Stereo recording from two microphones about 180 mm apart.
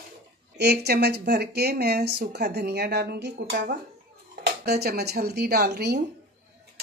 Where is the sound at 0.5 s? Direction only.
65° right (ahead or behind).